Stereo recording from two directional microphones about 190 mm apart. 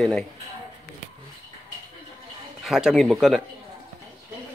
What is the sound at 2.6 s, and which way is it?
Speech, centre (ahead or behind).